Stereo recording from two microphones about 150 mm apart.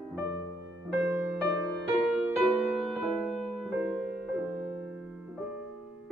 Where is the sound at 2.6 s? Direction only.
Centre (ahead or behind).